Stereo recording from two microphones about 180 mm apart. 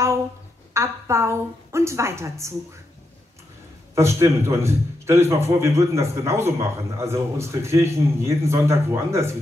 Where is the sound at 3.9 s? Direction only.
15° right (ahead or behind).